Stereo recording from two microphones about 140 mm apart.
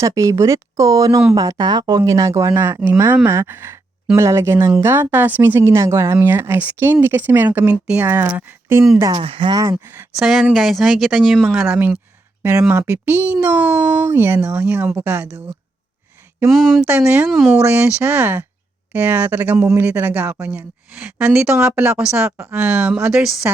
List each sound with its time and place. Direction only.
0.0 s speech: 20° right (ahead or behind)
9.1 s speech: 40° right (ahead or behind)
9.7 s speech: 5° right (ahead or behind)
12.4 s speech: 15° right (ahead or behind)
16.5 s speech: centre (ahead or behind)
16.8 s speech: 15° right (ahead or behind)
17.2 s speech: centre (ahead or behind)
22.3 s speech: 20° right (ahead or behind)
22.5 s speech: 10° right (ahead or behind)